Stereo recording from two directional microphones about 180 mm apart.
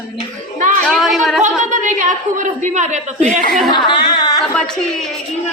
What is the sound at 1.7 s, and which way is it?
A woman's voice, 45° right (ahead or behind).